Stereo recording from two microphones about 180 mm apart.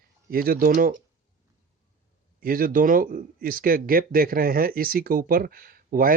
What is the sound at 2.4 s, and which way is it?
Speech, 50° right (ahead or behind).